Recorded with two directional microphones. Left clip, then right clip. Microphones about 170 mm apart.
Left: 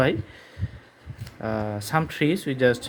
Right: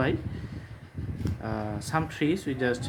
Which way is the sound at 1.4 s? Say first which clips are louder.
Left 7 dB; 45° left (ahead or behind).